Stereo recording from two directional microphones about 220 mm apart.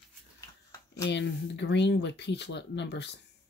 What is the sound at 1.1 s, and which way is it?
Speech, 50° left (ahead or behind).